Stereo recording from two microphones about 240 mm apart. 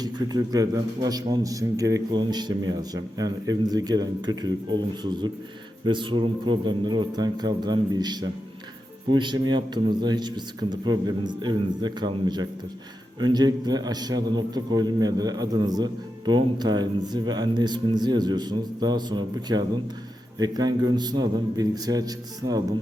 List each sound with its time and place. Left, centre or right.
0.0 s a man's voice: centre
5.8 s a man's voice: centre